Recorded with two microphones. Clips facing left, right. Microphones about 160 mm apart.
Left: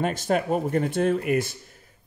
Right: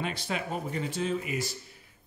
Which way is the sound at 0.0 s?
45° left (ahead or behind).